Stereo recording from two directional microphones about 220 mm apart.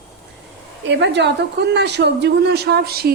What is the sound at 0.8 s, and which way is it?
A woman's voice, 55° right (ahead or behind).